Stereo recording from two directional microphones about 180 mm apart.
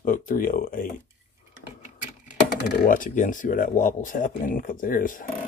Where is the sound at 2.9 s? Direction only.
50° left (ahead or behind).